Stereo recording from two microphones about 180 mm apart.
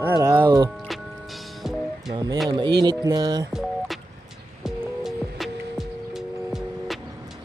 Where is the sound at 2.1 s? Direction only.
25° right (ahead or behind).